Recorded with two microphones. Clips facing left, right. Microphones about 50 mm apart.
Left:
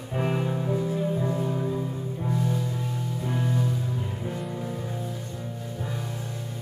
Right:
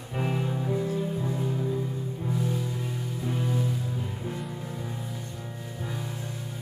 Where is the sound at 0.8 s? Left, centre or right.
Left.